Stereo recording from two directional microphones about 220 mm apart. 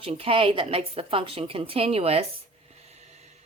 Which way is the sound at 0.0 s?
25° right (ahead or behind).